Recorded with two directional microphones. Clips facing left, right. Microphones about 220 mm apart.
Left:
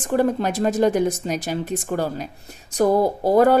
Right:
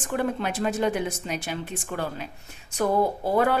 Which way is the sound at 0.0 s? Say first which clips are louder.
Left 7 dB; 40° left (ahead or behind).